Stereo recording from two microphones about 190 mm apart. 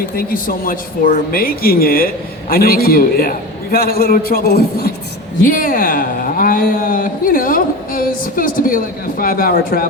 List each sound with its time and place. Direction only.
0.2 s speech: 50° left (ahead or behind)
5.5 s speech: 45° left (ahead or behind)